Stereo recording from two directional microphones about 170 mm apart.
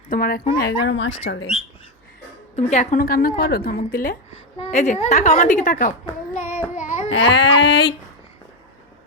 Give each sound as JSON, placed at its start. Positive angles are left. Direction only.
{"t": 0.1, "sound": "a woman's voice", "side_deg": 60}
{"t": 0.5, "sound": "speech", "side_deg": 90}
{"t": 2.6, "sound": "a woman's voice", "side_deg": 45}
{"t": 4.3, "sound": "a woman's voice", "side_deg": 35}
{"t": 6.7, "sound": "a sound", "side_deg": 40}
{"t": 7.1, "sound": "speech", "side_deg": 90}